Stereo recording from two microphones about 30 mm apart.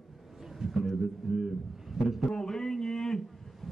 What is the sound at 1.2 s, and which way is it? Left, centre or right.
Speech, centre.